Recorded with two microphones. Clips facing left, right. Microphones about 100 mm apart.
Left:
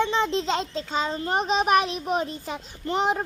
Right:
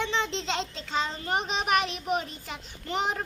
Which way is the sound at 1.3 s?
35° left (ahead or behind).